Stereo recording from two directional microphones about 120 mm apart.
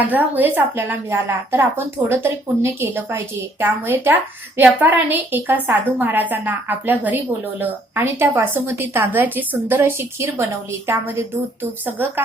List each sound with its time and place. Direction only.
0.1 s a woman's voice: 15° right (ahead or behind)